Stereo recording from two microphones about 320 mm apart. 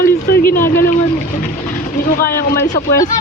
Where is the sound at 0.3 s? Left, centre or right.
Left.